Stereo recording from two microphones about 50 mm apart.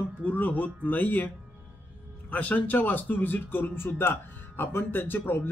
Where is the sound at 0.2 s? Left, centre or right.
Left.